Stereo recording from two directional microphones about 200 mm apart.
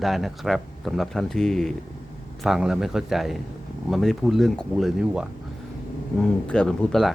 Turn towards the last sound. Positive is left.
turn(degrees=0)  # may be behind; listen again after turning